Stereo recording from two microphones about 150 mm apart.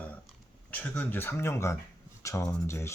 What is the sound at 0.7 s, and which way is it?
Speech, 10° left (ahead or behind).